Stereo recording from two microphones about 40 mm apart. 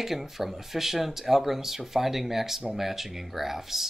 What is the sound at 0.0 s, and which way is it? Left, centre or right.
Speech, centre.